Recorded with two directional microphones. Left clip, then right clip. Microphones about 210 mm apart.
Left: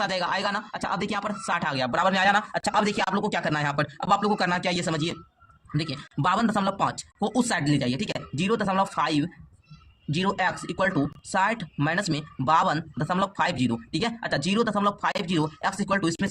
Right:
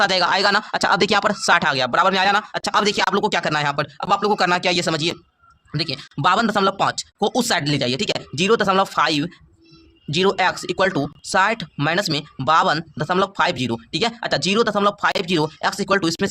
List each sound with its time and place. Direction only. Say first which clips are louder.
0.0 s speech: right 9 dB; 30° right (ahead or behind)